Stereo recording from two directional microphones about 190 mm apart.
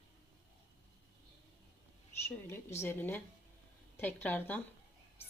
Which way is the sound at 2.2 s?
15° left (ahead or behind).